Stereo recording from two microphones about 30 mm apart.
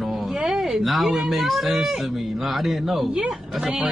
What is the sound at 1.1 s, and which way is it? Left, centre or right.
Speech, centre.